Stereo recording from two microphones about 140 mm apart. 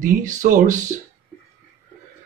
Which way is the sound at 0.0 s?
65° right (ahead or behind).